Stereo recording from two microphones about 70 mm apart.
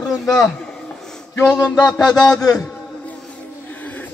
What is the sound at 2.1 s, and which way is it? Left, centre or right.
Speech, left.